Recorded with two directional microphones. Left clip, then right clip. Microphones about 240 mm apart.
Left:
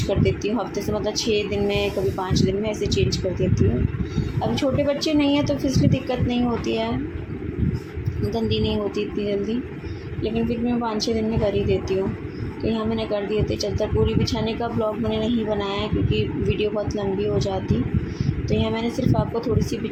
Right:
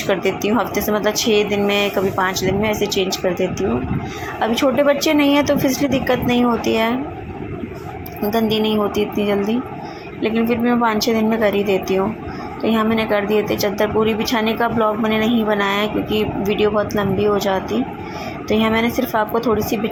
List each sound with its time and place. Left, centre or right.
0.1 s speech: centre
4.4 s speech: centre
8.3 s speech: centre
10.2 s speech: centre